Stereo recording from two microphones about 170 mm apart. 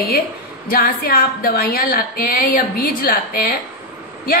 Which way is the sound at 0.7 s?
60° left (ahead or behind).